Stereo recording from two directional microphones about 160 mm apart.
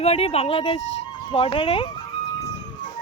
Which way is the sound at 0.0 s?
40° left (ahead or behind).